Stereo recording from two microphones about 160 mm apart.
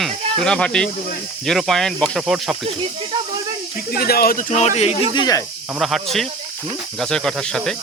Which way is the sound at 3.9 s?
70° left (ahead or behind).